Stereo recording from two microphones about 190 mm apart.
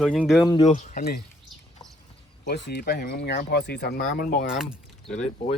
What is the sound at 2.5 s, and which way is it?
Speech, 60° left (ahead or behind).